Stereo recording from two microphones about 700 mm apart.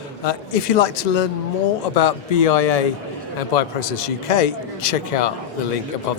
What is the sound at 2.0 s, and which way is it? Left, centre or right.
Speech, left.